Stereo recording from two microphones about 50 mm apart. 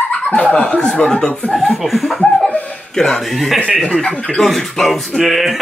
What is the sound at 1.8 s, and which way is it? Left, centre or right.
Speech, centre.